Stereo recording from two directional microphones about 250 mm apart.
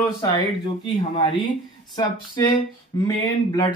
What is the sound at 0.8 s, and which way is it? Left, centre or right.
Speech, centre.